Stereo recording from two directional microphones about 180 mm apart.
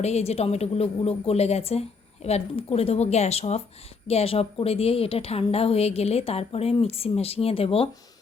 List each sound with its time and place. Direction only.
0.0 s a woman's voice: 35° left (ahead or behind)